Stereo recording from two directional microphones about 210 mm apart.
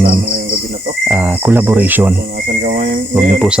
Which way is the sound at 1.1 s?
10° right (ahead or behind).